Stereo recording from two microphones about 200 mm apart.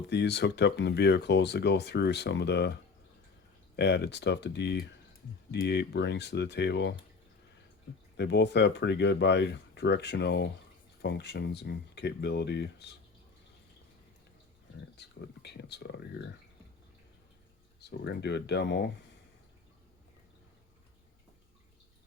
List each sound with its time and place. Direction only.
0.1 s speech: 60° left (ahead or behind)
3.8 s speech: 60° left (ahead or behind)
8.1 s speech: 60° left (ahead or behind)
14.9 s speech: 55° left (ahead or behind)
17.7 s speech: 55° left (ahead or behind)